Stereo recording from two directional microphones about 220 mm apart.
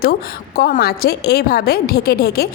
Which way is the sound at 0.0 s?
45° left (ahead or behind).